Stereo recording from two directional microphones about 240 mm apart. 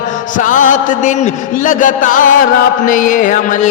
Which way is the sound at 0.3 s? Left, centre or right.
Left.